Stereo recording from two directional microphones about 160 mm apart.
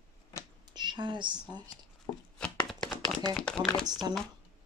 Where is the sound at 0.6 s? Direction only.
25° right (ahead or behind).